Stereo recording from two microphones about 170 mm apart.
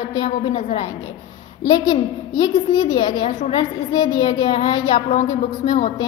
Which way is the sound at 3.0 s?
45° left (ahead or behind).